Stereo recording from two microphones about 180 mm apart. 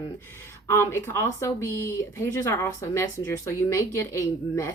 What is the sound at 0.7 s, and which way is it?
A woman's voice, 15° left (ahead or behind).